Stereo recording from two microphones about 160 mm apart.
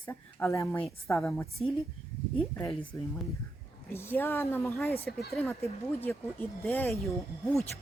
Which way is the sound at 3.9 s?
15° left (ahead or behind).